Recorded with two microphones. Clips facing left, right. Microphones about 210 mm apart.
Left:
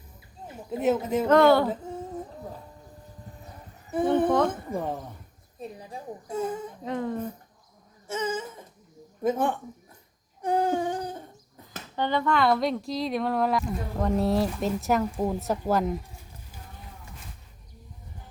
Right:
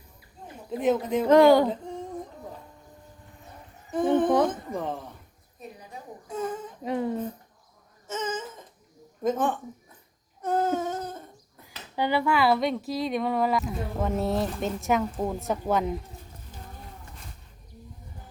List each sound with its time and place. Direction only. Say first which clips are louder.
0.8 s speech: even; 5° left (ahead or behind)
1.3 s speech: right 2 dB; 15° right (ahead or behind)
1.6 s a sound: right 1 dB; 5° left (ahead or behind)
4.1 s a woman's voice: right 1 dB; 10° left (ahead or behind)
6.3 s speech: left 1 dB; 10° left (ahead or behind)
6.8 s speech: right 3 dB; 15° right (ahead or behind)
8.0 s a sound: left 2 dB; 10° left (ahead or behind)
9.2 s speech: even; 10° left (ahead or behind)
10.4 s humming: left 1 dB; 15° left (ahead or behind)
11.9 s speech: right 1 dB; 10° right (ahead or behind)